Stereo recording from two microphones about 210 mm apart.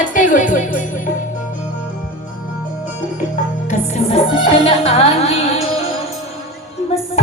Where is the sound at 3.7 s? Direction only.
35° left (ahead or behind).